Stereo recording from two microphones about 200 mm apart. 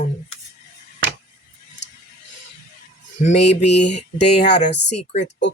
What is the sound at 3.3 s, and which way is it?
Speech, 35° left (ahead or behind).